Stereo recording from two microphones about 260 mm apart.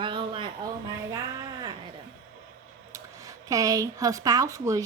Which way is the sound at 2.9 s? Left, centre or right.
Centre.